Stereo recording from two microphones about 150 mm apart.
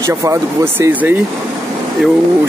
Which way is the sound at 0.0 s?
20° right (ahead or behind).